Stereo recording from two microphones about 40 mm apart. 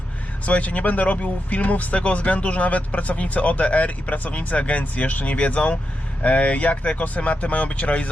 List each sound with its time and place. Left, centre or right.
0.4 s speech: left